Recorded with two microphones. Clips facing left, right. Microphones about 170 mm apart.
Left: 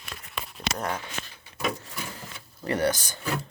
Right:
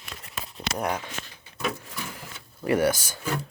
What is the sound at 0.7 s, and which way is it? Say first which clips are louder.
Speech: right 4 dB; 15° right (ahead or behind).